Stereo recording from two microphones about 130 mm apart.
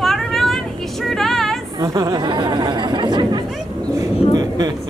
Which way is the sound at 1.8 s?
30° right (ahead or behind).